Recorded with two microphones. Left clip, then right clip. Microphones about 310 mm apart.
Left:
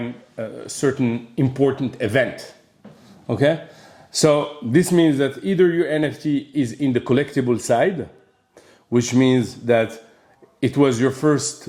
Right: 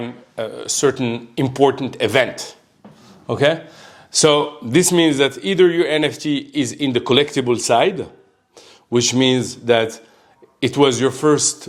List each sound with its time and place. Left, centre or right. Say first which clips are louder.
0.3 s speech: right 7 dB; right
1.4 s speech: right 4 dB; right